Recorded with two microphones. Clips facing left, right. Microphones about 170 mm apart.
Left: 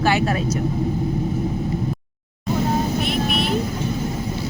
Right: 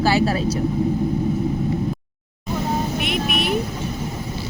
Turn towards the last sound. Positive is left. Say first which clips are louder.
# left 1 dB
turn(degrees=-15)  # may be behind; listen again after turning